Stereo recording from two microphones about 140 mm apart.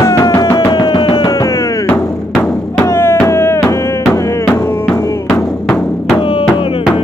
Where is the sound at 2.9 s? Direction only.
20° left (ahead or behind).